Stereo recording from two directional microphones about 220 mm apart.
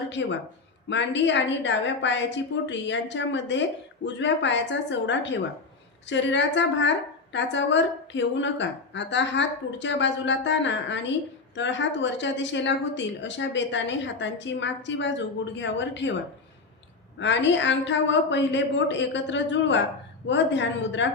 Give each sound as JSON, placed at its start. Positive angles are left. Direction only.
{"t": 0.1, "sound": "a woman's voice", "side_deg": 55}
{"t": 17.2, "sound": "a woman's voice", "side_deg": 55}